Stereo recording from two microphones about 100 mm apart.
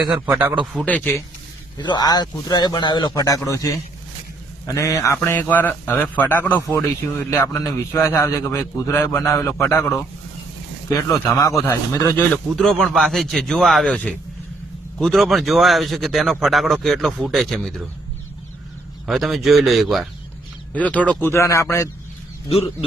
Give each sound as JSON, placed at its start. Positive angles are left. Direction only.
{"t": 0.3, "sound": "a man's voice", "side_deg": -15}
{"t": 0.6, "sound": "speech", "side_deg": 0}
{"t": 0.9, "sound": "speech", "side_deg": 15}
{"t": 1.8, "sound": "a man's voice", "side_deg": 45}
{"t": 5.1, "sound": "a man's voice", "side_deg": 20}
{"t": 12.1, "sound": "speech", "side_deg": 10}
{"t": 13.8, "sound": "speech", "side_deg": 10}
{"t": 14.9, "sound": "speech", "side_deg": 0}
{"t": 19.0, "sound": "speech", "side_deg": 0}
{"t": 20.7, "sound": "a man's voice", "side_deg": 15}
{"t": 22.4, "sound": "speech", "side_deg": 75}